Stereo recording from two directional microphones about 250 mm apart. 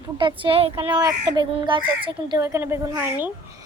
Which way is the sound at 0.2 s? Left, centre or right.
Centre.